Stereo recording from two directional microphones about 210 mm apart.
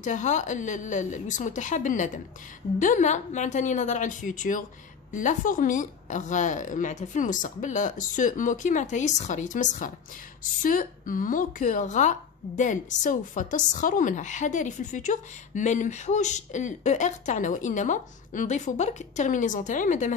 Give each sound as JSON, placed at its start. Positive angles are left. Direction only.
{"t": 0.0, "sound": "speech", "side_deg": 35}